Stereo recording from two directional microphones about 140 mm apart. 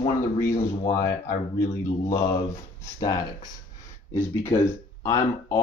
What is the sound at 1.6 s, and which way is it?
Speech, 20° left (ahead or behind).